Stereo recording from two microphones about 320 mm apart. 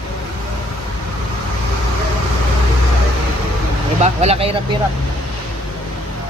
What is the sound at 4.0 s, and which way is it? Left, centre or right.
Speech, centre.